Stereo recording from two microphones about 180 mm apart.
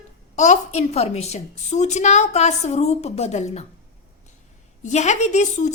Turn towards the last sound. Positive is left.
turn(degrees=40)  # may be behind; listen again after turning